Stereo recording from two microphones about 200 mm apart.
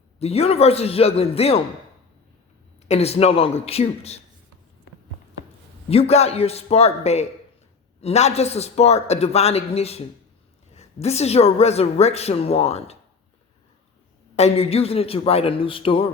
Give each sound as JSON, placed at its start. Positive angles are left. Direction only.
{"t": 0.2, "sound": "a woman's voice", "side_deg": 30}
{"t": 2.8, "sound": "a woman's voice", "side_deg": 30}
{"t": 5.9, "sound": "a woman's voice", "side_deg": 30}
{"t": 14.3, "sound": "a man's voice", "side_deg": 30}